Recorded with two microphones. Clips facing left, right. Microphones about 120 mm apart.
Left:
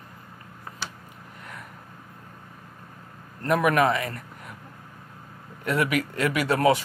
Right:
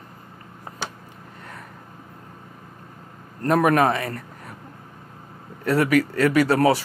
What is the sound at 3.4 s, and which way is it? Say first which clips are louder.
Speech: right 3 dB; 40° right (ahead or behind).